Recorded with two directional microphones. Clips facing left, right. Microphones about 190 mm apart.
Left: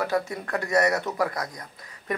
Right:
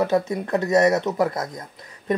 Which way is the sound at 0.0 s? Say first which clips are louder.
Right 6 dB; 20° right (ahead or behind).